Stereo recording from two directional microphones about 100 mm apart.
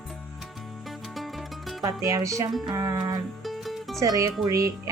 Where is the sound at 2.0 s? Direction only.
30° right (ahead or behind).